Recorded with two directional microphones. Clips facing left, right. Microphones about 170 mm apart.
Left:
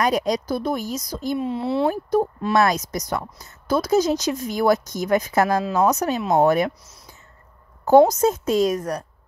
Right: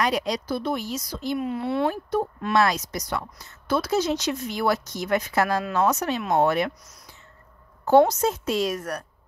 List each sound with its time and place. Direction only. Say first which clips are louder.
0.0 s speech: left 4 dB; 45° left (ahead or behind)
1.4 s speech: left 3 dB; 30° left (ahead or behind)
1.9 s speech: left 5 dB; 40° left (ahead or behind)
5.5 s speech: left 4 dB; 20° left (ahead or behind)
5.9 s speech: left 3 dB; 40° left (ahead or behind)
8.1 s speech: left 5 dB; 45° left (ahead or behind)